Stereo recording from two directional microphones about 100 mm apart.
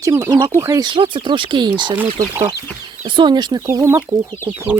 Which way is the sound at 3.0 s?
50° right (ahead or behind).